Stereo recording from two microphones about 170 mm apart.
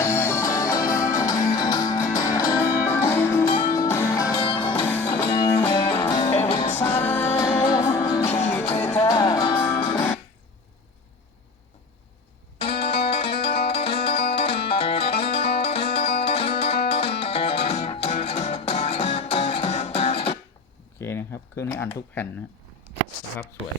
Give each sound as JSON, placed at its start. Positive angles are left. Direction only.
{"t": 0.0, "sound": "music", "side_deg": 15}
{"t": 2.6, "sound": "music", "side_deg": 10}
{"t": 4.4, "sound": "music", "side_deg": 30}
{"t": 6.6, "sound": "music", "side_deg": 10}
{"t": 12.5, "sound": "music", "side_deg": 35}
{"t": 21.0, "sound": "a sound", "side_deg": 15}